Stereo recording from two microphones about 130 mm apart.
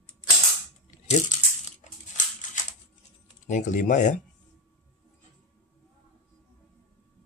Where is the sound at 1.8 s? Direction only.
70° left (ahead or behind).